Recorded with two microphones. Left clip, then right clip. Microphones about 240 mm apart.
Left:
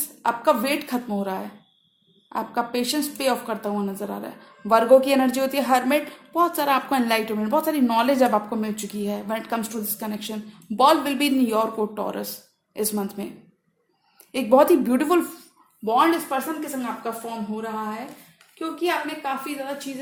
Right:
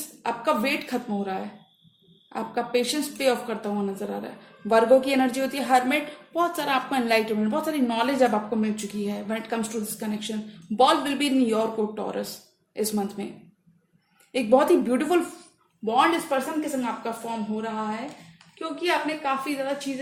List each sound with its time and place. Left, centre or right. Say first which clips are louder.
0.2 s a woman's voice: left 4 dB; left
14.3 s a woman's voice: left 3 dB; left
18.8 s a woman's voice: even; left